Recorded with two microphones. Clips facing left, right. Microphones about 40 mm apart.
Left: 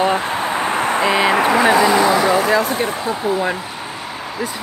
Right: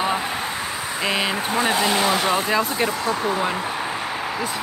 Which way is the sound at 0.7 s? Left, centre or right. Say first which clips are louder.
Left 10 dB; left.